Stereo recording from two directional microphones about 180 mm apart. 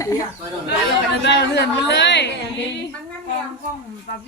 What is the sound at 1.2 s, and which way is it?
Speech, 65° left (ahead or behind).